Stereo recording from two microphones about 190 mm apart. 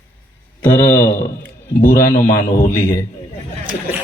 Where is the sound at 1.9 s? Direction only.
15° left (ahead or behind).